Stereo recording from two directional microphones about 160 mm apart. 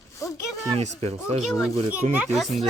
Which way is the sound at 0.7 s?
40° right (ahead or behind).